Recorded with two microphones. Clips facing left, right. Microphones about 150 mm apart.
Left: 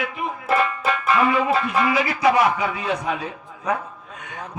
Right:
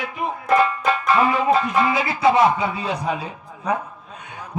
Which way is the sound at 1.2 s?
30° right (ahead or behind).